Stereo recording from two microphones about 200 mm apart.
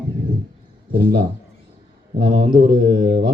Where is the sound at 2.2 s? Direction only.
30° right (ahead or behind).